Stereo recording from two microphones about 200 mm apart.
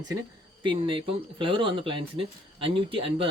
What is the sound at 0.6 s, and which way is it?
A man's voice, 25° right (ahead or behind).